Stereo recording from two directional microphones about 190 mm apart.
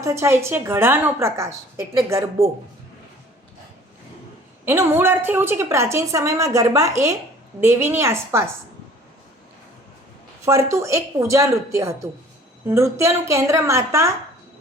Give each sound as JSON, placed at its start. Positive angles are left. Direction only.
{"t": 0.0, "sound": "a woman's voice", "side_deg": -15}
{"t": 4.6, "sound": "a woman's voice", "side_deg": -15}
{"t": 10.4, "sound": "a woman's voice", "side_deg": -15}